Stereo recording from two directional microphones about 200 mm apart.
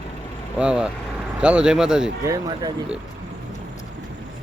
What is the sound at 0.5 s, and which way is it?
Speech, 5° right (ahead or behind).